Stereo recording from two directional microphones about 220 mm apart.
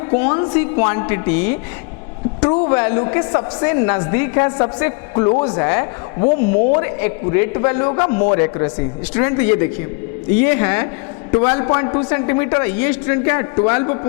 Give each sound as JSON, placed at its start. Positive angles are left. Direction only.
{"t": 0.1, "sound": "a woman's voice", "side_deg": 25}
{"t": 6.7, "sound": "a man's voice", "side_deg": 15}